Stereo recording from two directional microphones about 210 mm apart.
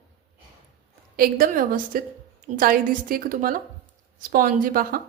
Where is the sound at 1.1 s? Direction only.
45° right (ahead or behind).